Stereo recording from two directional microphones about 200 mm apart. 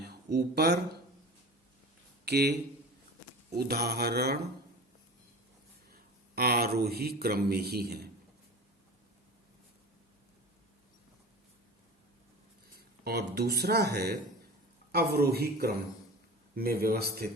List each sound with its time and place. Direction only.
0.0 s speech: 55° right (ahead or behind)
2.2 s speech: 55° right (ahead or behind)
5.9 s a man's voice: 50° right (ahead or behind)
13.1 s speech: 55° right (ahead or behind)